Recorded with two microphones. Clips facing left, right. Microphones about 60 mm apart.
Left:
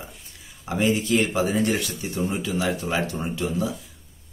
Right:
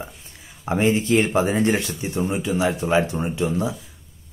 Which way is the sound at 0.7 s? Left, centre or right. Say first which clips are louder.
Right 3 dB; right.